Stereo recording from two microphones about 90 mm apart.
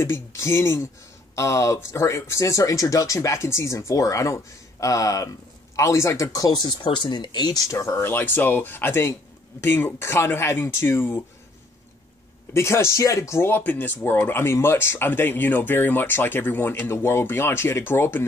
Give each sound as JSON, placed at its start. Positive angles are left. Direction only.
{"t": 0.0, "sound": "speech", "side_deg": 30}
{"t": 6.8, "sound": "speech", "side_deg": 60}
{"t": 7.7, "sound": "speech", "side_deg": 35}
{"t": 8.0, "sound": "speech", "side_deg": 25}
{"t": 12.5, "sound": "speech", "side_deg": 30}